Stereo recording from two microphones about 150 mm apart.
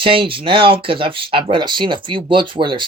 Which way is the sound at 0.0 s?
35° right (ahead or behind).